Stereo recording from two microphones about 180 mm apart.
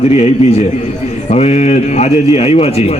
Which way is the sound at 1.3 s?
35° left (ahead or behind).